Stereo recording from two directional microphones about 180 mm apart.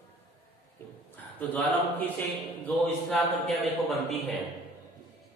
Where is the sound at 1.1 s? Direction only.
10° left (ahead or behind).